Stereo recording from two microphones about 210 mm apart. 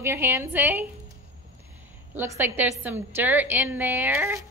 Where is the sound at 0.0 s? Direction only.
10° right (ahead or behind).